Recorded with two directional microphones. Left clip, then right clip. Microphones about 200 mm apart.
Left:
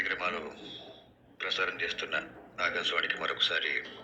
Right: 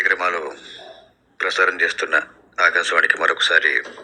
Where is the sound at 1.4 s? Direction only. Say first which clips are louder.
Right 14 dB; 50° right (ahead or behind).